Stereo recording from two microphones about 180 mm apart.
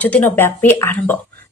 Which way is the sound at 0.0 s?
10° left (ahead or behind).